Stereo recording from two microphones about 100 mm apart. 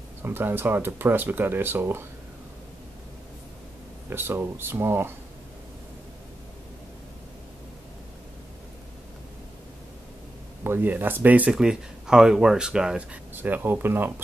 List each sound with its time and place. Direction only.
0.2 s speech: 20° right (ahead or behind)
4.1 s speech: 20° right (ahead or behind)
10.6 s speech: 20° right (ahead or behind)